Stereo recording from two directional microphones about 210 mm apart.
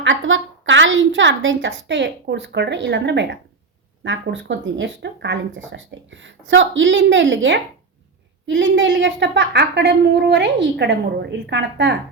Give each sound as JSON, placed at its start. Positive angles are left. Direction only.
{"t": 0.0, "sound": "speech", "side_deg": -65}